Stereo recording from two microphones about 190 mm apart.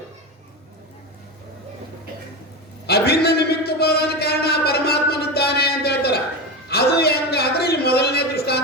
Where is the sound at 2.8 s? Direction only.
55° left (ahead or behind).